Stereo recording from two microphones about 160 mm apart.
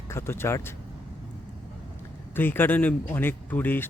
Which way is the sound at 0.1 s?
15° left (ahead or behind).